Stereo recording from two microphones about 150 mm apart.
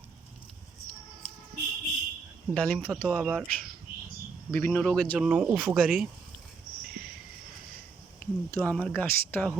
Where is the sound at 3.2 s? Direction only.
10° right (ahead or behind).